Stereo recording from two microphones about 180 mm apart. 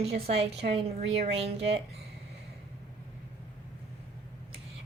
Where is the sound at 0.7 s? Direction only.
35° right (ahead or behind).